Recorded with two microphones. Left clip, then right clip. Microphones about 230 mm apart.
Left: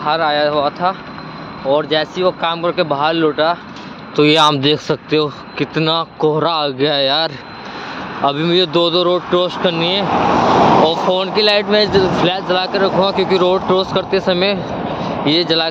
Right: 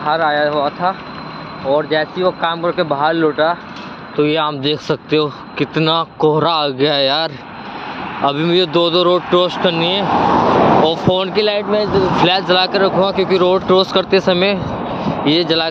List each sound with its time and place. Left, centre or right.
0.0 s speech: centre
4.2 s speech: left
4.7 s speech: centre
10.3 s vehicle: left
10.6 s vehicle: left
11.1 s speech: centre
11.5 s speech: centre
12.2 s speech: centre
13.7 s speech: centre
14.7 s vehicle: left
15.2 s speech: centre